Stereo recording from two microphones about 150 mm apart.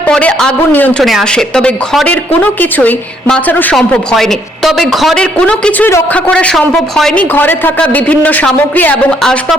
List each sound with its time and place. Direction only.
0.0 s speech: 10° left (ahead or behind)